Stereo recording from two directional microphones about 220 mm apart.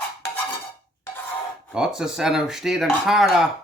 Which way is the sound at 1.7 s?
Centre (ahead or behind).